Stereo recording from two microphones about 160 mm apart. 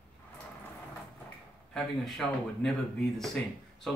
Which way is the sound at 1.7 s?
Centre (ahead or behind).